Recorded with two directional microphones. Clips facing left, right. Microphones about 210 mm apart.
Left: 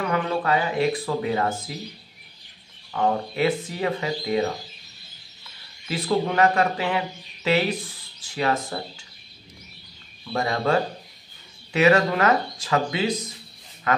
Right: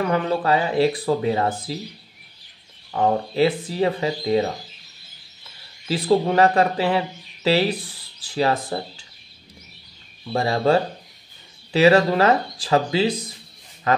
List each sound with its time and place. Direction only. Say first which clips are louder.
0.1 s speech: right 3 dB; 30° right (ahead or behind)
2.9 s speech: right 3 dB; 30° right (ahead or behind)
5.9 s speech: right 5 dB; 35° right (ahead or behind)
10.3 s speech: right 4 dB; 30° right (ahead or behind)